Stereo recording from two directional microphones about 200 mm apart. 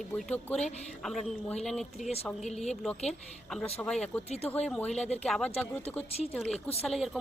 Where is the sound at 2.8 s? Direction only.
5° left (ahead or behind).